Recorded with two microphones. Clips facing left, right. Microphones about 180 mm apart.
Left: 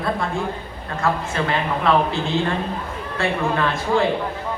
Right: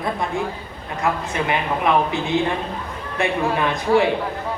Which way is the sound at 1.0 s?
15° right (ahead or behind).